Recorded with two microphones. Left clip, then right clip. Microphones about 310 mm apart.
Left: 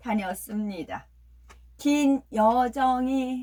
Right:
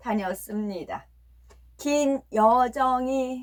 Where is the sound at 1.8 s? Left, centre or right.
Centre.